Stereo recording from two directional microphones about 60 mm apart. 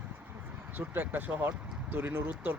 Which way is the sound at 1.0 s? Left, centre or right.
Right.